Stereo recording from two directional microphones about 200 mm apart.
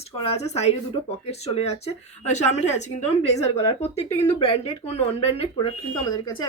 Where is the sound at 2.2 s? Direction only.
35° left (ahead or behind).